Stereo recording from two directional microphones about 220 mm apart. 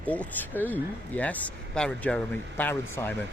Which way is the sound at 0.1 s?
5° left (ahead or behind).